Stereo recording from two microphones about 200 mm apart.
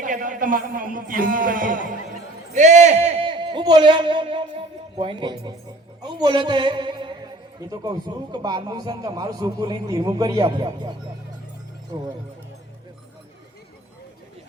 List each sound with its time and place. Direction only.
0.0 s a man's voice: 40° right (ahead or behind); by 10.9 s 20° right (ahead or behind)